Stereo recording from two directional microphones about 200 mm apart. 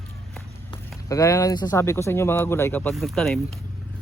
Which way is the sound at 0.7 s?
15° left (ahead or behind).